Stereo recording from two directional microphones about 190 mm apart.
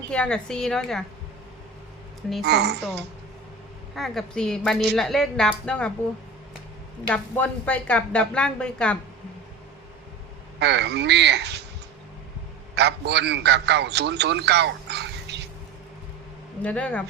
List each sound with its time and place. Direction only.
0.1 s a woman's voice: 5° left (ahead or behind)
2.4 s a man's voice: 60° right (ahead or behind)
3.9 s a woman's voice: centre (ahead or behind)
7.1 s a woman's voice: 10° left (ahead or behind)
10.6 s a man's voice: 65° right (ahead or behind)
12.7 s a man's voice: 60° right (ahead or behind)
16.6 s speech: 5° left (ahead or behind)